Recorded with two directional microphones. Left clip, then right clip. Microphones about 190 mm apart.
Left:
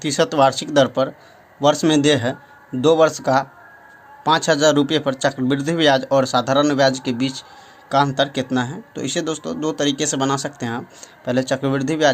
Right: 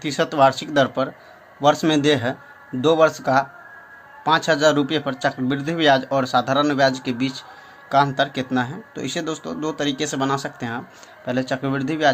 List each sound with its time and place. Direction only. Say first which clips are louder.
0.0 s a man's voice: left 1 dB; 30° left (ahead or behind)